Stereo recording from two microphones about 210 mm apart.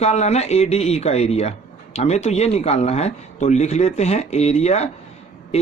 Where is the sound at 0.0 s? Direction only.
30° left (ahead or behind).